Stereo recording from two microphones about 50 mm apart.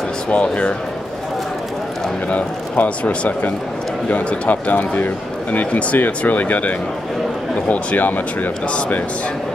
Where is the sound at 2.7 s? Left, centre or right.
Left.